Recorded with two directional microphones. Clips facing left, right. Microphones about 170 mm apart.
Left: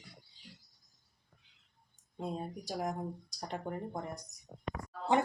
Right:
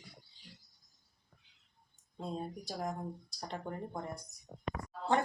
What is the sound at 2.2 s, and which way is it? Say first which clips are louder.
A woman's voice: left 1 dB; 10° left (ahead or behind).